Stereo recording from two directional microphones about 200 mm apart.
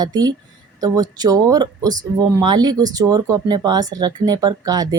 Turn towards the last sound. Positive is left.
turn(degrees=-20)  # may be behind; listen again after turning